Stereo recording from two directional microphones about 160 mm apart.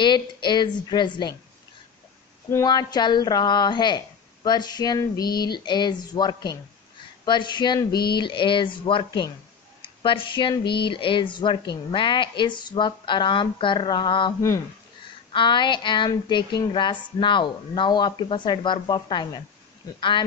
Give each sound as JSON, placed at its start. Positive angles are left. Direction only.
{"t": 0.0, "sound": "speech", "side_deg": 30}
{"t": 2.5, "sound": "speech", "side_deg": 25}
{"t": 7.9, "sound": "a sound", "side_deg": 80}
{"t": 8.2, "sound": "speech", "side_deg": 30}
{"t": 15.3, "sound": "speech", "side_deg": 30}